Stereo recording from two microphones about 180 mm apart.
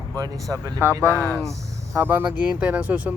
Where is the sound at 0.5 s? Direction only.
15° right (ahead or behind).